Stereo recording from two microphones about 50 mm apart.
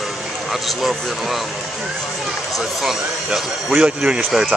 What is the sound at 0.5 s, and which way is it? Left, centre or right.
Speech, centre.